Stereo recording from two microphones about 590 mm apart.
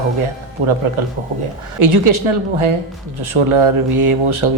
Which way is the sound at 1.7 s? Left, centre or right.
Right.